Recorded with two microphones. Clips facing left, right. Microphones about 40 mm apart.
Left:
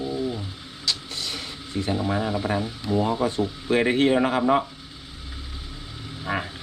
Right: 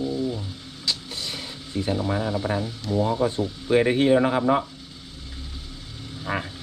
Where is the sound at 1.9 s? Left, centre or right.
Centre.